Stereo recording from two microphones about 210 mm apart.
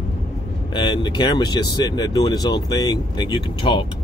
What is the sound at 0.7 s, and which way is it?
Speech, 20° left (ahead or behind).